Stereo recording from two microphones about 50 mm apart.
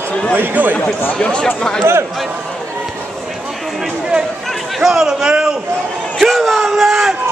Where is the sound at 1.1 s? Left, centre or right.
Centre.